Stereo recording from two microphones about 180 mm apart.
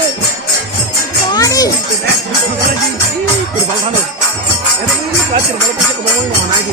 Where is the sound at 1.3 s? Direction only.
20° left (ahead or behind).